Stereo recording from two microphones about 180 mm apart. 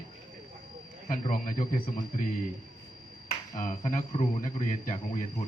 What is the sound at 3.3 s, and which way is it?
A man's voice, 45° left (ahead or behind).